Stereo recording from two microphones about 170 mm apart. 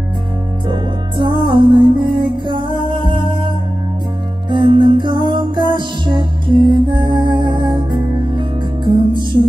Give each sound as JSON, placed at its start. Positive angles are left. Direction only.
{"t": 0.7, "sound": "music", "side_deg": -25}
{"t": 4.5, "sound": "music", "side_deg": -30}